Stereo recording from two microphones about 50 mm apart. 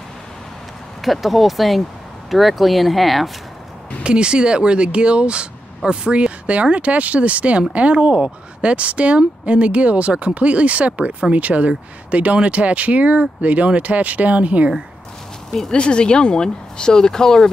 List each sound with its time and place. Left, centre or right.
1.0 s speech: centre
4.0 s speech: centre
15.7 s speech: left